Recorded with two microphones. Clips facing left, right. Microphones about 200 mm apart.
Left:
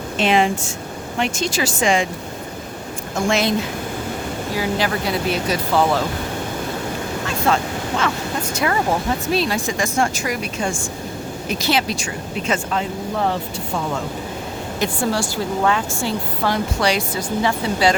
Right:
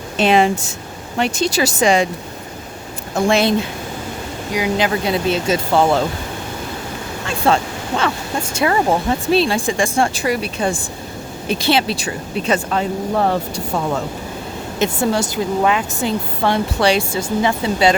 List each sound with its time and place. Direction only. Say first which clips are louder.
0.2 s speech: right 3 dB; 40° right (ahead or behind)
3.2 s speech: right 4 dB; 30° right (ahead or behind)
4.5 s speech: right 4 dB; 20° right (ahead or behind)
7.5 s speech: right 4 dB; 30° right (ahead or behind)
14.8 s speech: right 4 dB; 20° right (ahead or behind)